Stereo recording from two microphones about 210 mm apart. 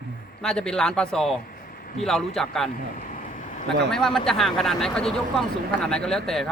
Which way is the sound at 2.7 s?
40° left (ahead or behind).